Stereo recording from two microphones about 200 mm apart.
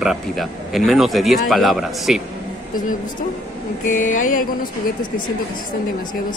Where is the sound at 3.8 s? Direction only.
40° left (ahead or behind).